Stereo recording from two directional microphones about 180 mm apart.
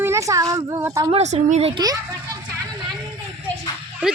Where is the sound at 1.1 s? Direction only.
35° right (ahead or behind).